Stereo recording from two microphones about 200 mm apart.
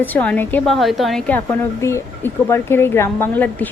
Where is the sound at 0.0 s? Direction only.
10° left (ahead or behind).